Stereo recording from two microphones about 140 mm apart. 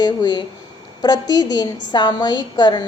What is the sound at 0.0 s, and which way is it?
A woman's voice, 30° left (ahead or behind).